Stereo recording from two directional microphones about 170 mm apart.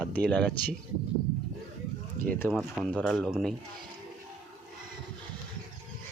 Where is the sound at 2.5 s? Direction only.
5° right (ahead or behind).